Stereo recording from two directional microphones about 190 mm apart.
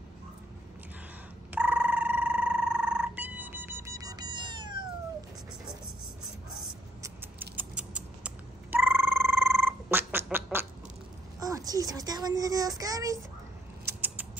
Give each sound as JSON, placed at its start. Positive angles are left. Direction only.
{"t": 1.5, "sound": "cat", "side_deg": -5}
{"t": 7.0, "sound": "a sound", "side_deg": -10}
{"t": 11.3, "sound": "child singing", "side_deg": -20}
{"t": 13.8, "sound": "creak", "side_deg": -10}